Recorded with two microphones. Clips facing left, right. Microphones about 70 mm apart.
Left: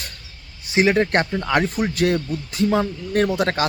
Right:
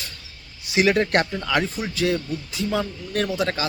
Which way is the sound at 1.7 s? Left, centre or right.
Left.